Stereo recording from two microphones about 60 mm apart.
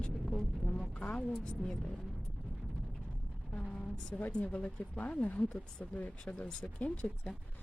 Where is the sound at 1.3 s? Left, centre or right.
Centre.